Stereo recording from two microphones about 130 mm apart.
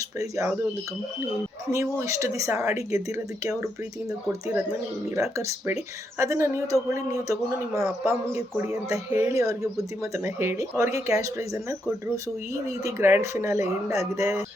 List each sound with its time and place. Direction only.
0.2 s speech: 25° right (ahead or behind)
1.7 s speech: 25° right (ahead or behind)
5.1 s speech: 20° right (ahead or behind)